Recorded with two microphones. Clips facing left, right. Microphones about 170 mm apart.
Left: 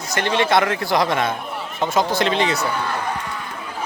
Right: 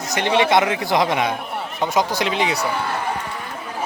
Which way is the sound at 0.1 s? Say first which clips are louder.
Right 1 dB; 15° right (ahead or behind).